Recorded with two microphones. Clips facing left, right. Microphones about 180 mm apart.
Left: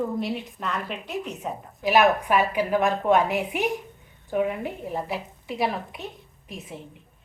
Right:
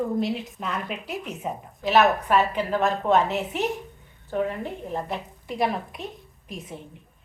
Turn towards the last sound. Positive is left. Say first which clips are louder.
# right 1 dB
turn(degrees=0)  # may be behind; listen again after turning